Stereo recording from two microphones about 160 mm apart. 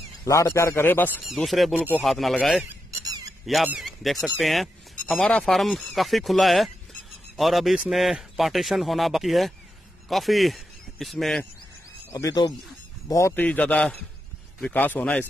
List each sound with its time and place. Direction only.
0.2 s a man's voice: 20° left (ahead or behind)
1.2 s speech: centre (ahead or behind)
3.1 s squeak: 25° right (ahead or behind)
3.4 s a man's voice: centre (ahead or behind)
12.1 s a man's voice: 20° left (ahead or behind)